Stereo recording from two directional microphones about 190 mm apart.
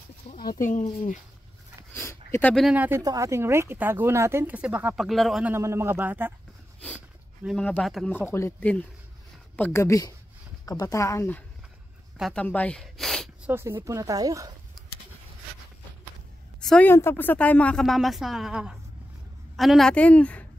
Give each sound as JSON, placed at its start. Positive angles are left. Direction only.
{"t": 0.3, "sound": "a sound", "side_deg": 50}
{"t": 2.0, "sound": "a sound", "side_deg": 15}
{"t": 2.5, "sound": "speech", "side_deg": -5}
{"t": 5.5, "sound": "speech", "side_deg": -15}
{"t": 7.4, "sound": "a woman's voice", "side_deg": 5}
{"t": 8.3, "sound": "speech", "side_deg": 15}
{"t": 12.2, "sound": "a woman's voice", "side_deg": 0}
{"t": 12.4, "sound": "a sound", "side_deg": 5}
{"t": 13.5, "sound": "speech", "side_deg": -15}
{"t": 16.5, "sound": "a woman's voice", "side_deg": 5}